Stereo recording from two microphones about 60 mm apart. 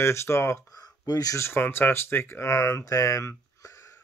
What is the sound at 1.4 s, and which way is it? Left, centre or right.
Speech, left.